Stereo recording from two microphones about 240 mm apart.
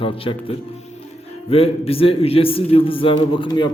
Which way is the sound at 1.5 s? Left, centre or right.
Left.